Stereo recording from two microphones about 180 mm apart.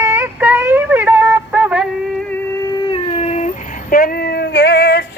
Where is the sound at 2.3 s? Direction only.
20° left (ahead or behind); by 3.6 s 40° left (ahead or behind).